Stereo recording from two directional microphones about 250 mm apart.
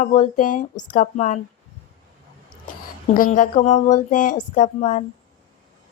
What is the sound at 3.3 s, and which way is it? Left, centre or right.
A woman's voice, left.